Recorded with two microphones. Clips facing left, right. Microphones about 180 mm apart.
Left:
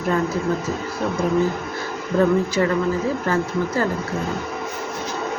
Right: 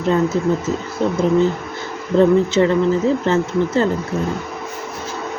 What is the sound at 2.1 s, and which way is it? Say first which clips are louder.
Speech: right 5 dB; 25° right (ahead or behind).